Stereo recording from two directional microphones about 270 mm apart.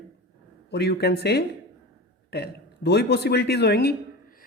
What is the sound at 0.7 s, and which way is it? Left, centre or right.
A man's voice, left.